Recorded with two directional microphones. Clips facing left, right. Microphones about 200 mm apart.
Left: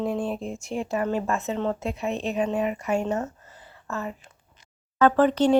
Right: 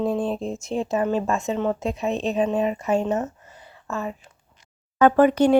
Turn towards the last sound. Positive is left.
turn(degrees=-10)  # may be behind; listen again after turning